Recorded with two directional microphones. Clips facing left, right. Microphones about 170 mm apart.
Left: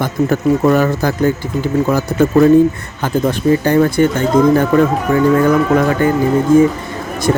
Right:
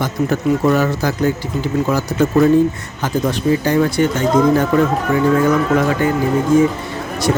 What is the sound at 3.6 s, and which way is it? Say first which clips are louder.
Speech: left 3 dB; 50° left (ahead or behind).